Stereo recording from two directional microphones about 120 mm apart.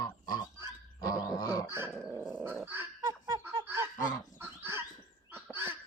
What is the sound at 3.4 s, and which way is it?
Snicker, 20° right (ahead or behind).